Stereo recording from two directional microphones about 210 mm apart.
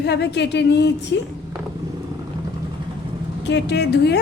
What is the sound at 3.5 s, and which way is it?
Speech, 55° left (ahead or behind).